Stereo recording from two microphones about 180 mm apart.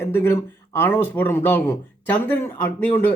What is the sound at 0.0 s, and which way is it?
Speech, 15° left (ahead or behind).